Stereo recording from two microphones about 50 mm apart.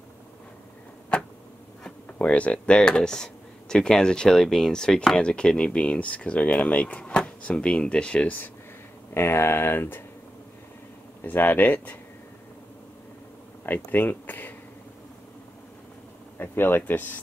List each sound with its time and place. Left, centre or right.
2.1 s speech: left
9.1 s speech: left
11.2 s speech: left
13.7 s speech: left
16.3 s speech: left